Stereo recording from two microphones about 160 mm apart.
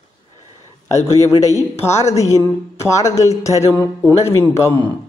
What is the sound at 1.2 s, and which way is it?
A man's voice, 20° left (ahead or behind).